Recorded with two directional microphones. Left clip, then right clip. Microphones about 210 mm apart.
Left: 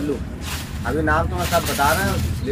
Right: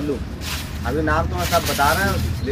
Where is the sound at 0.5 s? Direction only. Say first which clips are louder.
Even; 25° left (ahead or behind).